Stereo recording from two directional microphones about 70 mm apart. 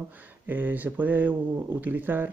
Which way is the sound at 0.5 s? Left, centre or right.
Right.